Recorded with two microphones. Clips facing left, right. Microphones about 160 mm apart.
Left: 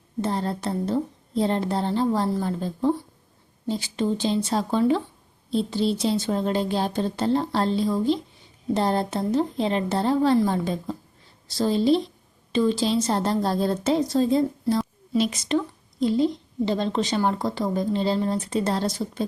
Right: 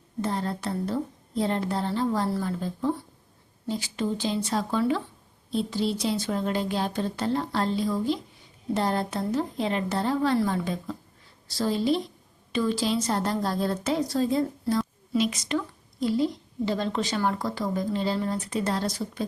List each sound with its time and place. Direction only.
0.2 s a woman's voice: 30° left (ahead or behind)